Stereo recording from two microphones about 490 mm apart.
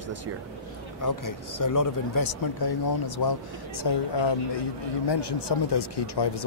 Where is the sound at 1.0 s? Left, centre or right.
Left.